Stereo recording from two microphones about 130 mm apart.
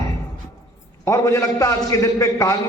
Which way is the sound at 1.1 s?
25° left (ahead or behind).